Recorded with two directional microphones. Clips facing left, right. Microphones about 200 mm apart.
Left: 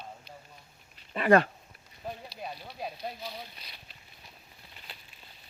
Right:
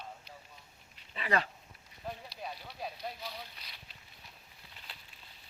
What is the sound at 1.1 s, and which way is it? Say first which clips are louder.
Speech: left 11 dB; 55° left (ahead or behind).